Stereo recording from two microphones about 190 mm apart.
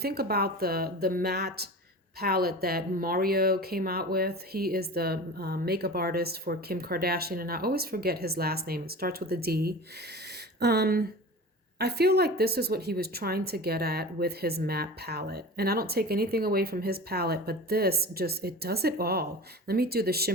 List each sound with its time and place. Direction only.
0.0 s a woman's voice: 55° right (ahead or behind)